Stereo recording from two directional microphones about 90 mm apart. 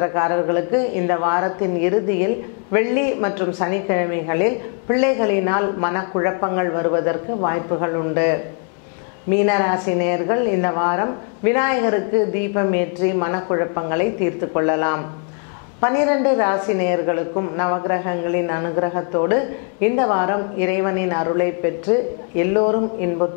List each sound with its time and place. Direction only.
0.0 s a man's voice: 20° left (ahead or behind)